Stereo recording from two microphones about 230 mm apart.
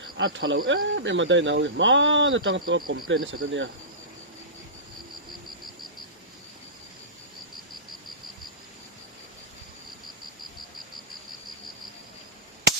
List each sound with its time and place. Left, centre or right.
0.2 s speech: right